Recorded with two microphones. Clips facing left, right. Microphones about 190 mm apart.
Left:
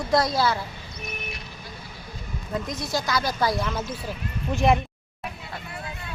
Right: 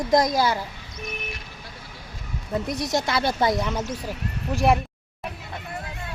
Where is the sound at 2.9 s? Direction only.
25° right (ahead or behind).